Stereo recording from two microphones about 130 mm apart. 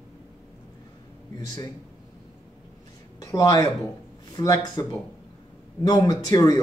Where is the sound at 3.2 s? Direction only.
25° left (ahead or behind).